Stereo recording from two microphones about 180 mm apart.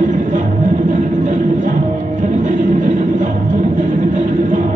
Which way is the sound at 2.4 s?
45° right (ahead or behind).